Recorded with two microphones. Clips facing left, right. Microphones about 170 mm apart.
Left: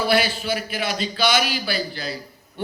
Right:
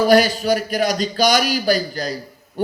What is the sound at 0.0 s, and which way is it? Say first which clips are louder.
Speech: right 7 dB; 40° right (ahead or behind).